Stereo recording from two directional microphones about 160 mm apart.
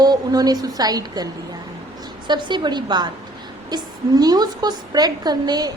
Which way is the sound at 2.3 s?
30° right (ahead or behind).